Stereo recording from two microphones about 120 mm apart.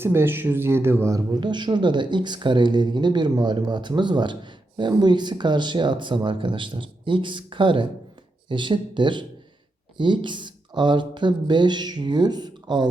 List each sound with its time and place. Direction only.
0.0 s speech: 20° right (ahead or behind)
1.4 s speech: 40° right (ahead or behind)